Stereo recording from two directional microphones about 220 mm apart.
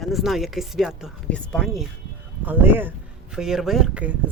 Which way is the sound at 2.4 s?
10° right (ahead or behind).